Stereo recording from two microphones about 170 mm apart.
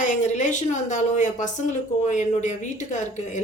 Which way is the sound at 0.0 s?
45° left (ahead or behind).